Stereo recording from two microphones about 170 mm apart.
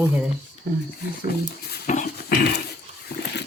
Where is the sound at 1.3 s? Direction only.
70° left (ahead or behind).